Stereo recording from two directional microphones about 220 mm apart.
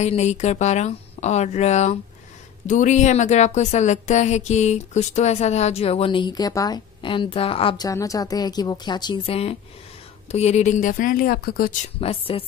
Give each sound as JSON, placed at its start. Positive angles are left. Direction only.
{"t": 0.0, "sound": "speech", "side_deg": 30}
{"t": 12.0, "sound": "speech", "side_deg": 25}